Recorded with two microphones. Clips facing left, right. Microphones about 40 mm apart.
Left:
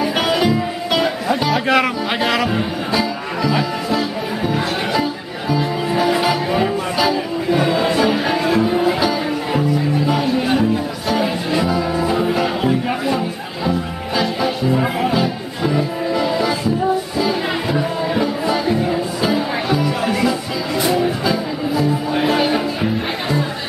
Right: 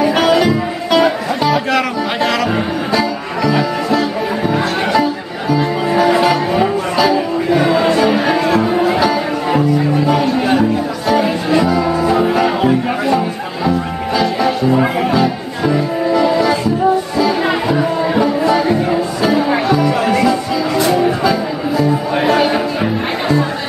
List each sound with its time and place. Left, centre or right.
0.1 s music: centre
6.2 s music: centre
11.1 s music: centre
11.9 s music: centre
12.2 s music: centre
13.7 s music: centre
14.7 s music: centre
15.1 s music: centre
17.6 s music: centre
20.2 s music: centre